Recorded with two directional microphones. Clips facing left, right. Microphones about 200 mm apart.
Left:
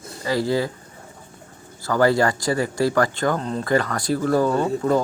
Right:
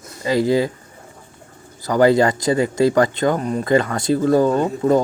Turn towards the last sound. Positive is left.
turn(degrees=-20)  # may be behind; listen again after turning